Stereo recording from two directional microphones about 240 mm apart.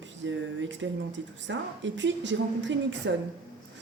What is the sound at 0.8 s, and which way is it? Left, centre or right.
Speech, right.